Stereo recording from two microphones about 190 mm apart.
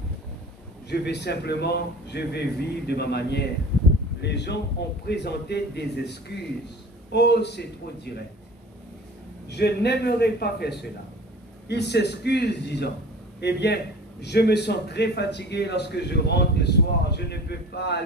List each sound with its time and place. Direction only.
0.8 s a man's voice: 60° left (ahead or behind)
9.5 s a man's voice: 60° left (ahead or behind)